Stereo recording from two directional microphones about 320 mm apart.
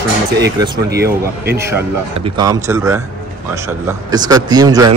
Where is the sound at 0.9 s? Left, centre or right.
Right.